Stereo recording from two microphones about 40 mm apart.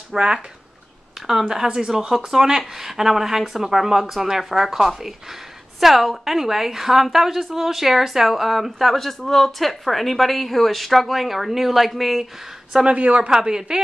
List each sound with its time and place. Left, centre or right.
0.1 s speech: centre
1.2 s a sound: centre
1.5 s speech: centre
12.8 s speech: right
13.3 s speech: centre